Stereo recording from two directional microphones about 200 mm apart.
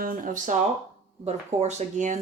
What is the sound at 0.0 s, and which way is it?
Speech, 45° right (ahead or behind).